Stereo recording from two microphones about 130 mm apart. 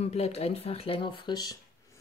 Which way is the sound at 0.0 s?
55° left (ahead or behind).